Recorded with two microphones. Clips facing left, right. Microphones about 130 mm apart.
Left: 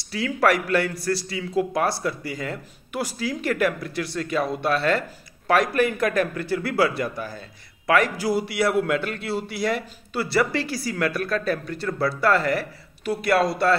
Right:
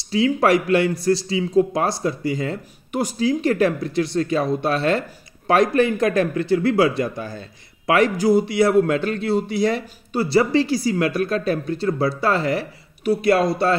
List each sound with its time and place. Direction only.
0.1 s speech: 20° right (ahead or behind)